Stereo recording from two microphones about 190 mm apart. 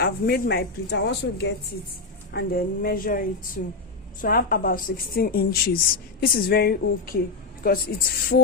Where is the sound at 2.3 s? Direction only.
50° left (ahead or behind).